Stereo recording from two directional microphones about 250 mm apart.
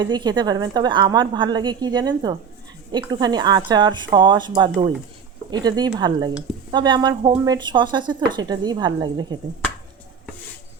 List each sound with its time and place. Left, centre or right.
0.0 s a woman's voice: centre